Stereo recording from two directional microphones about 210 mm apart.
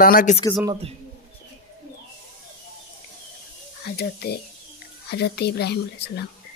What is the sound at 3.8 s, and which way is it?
A woman's voice, 50° left (ahead or behind).